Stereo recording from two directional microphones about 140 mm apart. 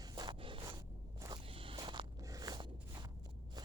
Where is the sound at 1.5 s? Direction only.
40° right (ahead or behind).